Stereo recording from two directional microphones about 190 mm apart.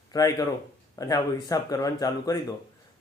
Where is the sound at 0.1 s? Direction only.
20° left (ahead or behind).